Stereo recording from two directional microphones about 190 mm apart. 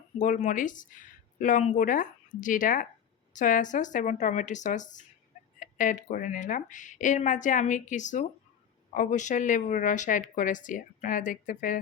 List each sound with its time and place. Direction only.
0.2 s a woman's voice: 40° left (ahead or behind)